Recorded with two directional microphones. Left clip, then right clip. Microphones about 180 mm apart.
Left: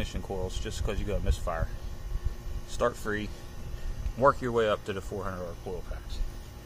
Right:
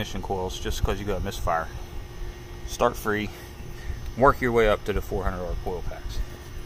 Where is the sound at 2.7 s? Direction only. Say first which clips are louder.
Right 6 dB; 10° right (ahead or behind).